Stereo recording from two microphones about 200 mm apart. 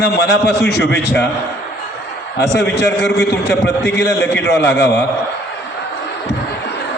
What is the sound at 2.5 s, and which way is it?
Speech, 55° left (ahead or behind).